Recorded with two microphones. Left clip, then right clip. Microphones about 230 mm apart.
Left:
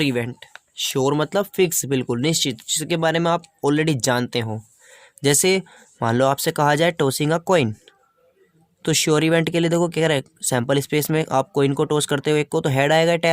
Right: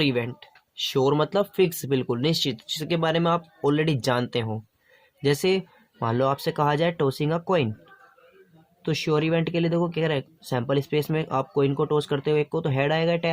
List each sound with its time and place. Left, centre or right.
0.0 s speech: left
8.8 s speech: left